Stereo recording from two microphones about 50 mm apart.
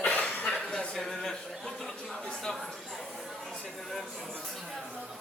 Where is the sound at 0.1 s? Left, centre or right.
Left.